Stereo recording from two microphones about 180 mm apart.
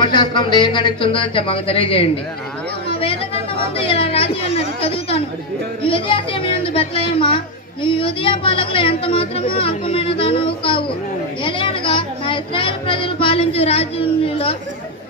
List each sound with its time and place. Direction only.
0.0 s a woman's voice: 25° left (ahead or behind)
2.9 s a sound: 30° left (ahead or behind)
3.7 s a woman's voice: 30° left (ahead or behind)